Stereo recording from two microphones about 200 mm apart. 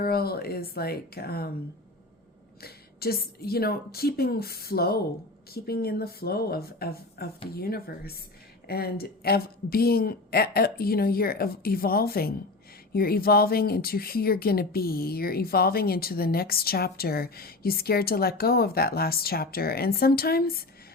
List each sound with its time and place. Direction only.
0.0 s speech: 50° left (ahead or behind)
2.6 s speech: 50° left (ahead or behind)